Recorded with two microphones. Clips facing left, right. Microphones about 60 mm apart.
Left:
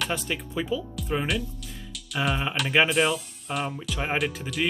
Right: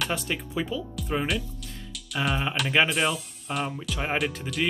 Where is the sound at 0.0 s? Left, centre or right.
Centre.